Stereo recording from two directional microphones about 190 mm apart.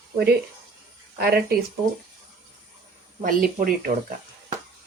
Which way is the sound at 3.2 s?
45° right (ahead or behind).